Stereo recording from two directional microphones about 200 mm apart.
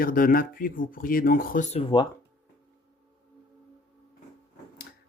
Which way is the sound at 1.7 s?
25° left (ahead or behind).